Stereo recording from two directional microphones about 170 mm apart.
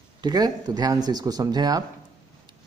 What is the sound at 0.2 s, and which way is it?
A man's voice, 25° right (ahead or behind).